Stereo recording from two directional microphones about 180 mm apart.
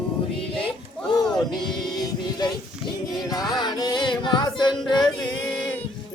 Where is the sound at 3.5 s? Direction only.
20° left (ahead or behind).